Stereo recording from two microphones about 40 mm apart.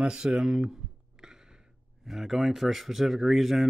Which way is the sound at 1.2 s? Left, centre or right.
Centre.